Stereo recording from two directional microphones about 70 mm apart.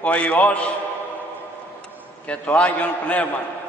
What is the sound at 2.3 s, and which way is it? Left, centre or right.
A man's voice, centre.